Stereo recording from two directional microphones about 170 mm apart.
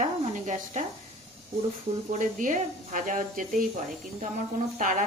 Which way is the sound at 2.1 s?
50° right (ahead or behind).